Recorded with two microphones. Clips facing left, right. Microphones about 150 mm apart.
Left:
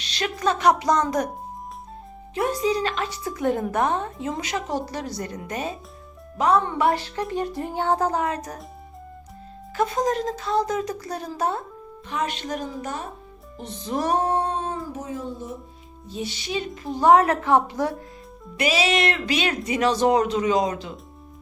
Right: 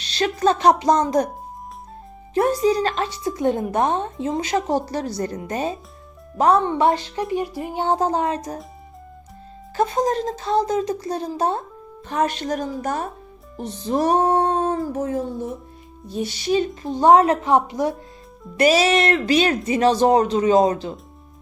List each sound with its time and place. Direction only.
0.0 s speech: 35° right (ahead or behind)
2.3 s speech: 35° right (ahead or behind)
3.1 s speech: 25° right (ahead or behind)
9.7 s speech: 30° right (ahead or behind)
12.0 s speech: 40° right (ahead or behind)
13.6 s speech: 35° right (ahead or behind)
14.4 s speech: 45° right (ahead or behind)
16.1 s speech: 40° right (ahead or behind)
16.8 s speech: 25° right (ahead or behind)
18.5 s speech: 40° right (ahead or behind)